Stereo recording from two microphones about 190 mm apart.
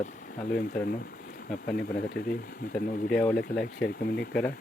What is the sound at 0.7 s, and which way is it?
Speech, 5° left (ahead or behind).